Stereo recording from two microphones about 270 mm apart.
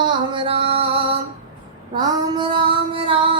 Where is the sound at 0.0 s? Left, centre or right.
Centre.